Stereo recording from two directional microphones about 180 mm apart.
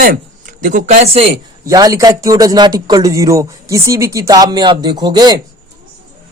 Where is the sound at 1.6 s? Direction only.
20° right (ahead or behind).